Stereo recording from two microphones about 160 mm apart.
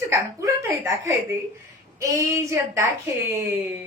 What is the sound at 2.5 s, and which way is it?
Speech, 15° right (ahead or behind).